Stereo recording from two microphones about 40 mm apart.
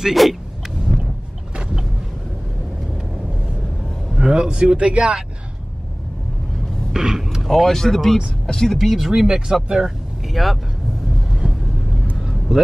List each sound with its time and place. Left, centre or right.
0.1 s speech: centre
0.9 s vehicle: centre
4.1 s speech: centre
6.9 s speech: centre
7.4 s speech: centre
8.9 s speech: centre
9.8 s vehicle: centre
12.2 s vehicle: centre